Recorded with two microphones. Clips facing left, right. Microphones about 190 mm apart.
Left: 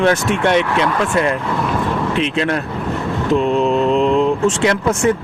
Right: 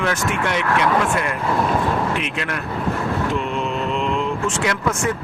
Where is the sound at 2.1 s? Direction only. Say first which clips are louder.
Left 8 dB; 30° left (ahead or behind).